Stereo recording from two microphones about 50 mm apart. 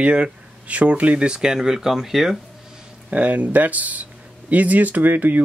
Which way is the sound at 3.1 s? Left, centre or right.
Right.